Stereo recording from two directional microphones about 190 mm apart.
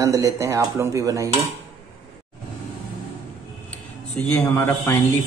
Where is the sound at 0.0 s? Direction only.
15° right (ahead or behind).